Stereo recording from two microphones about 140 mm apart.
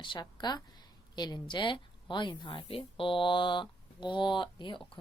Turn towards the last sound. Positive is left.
turn(degrees=35)  # may be behind; listen again after turning